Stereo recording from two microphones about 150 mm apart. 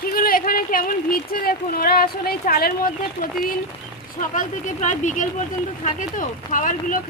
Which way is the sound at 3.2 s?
60° left (ahead or behind).